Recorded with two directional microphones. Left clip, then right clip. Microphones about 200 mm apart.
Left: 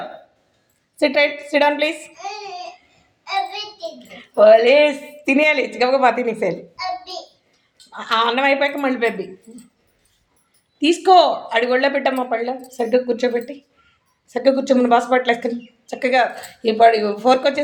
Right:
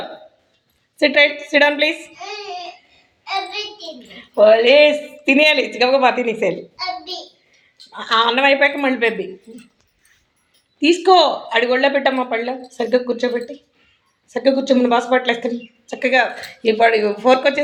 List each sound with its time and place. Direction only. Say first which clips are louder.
0.9 s speech: right 3 dB; 15° left (ahead or behind)
4.1 s speech: left 1 dB; 15° left (ahead or behind)
10.8 s speech: even; 15° left (ahead or behind)